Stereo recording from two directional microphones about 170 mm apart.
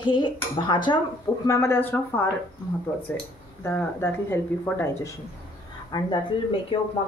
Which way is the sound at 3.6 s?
15° left (ahead or behind).